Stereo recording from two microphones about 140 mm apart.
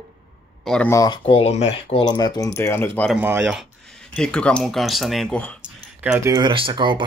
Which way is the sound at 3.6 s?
5° left (ahead or behind).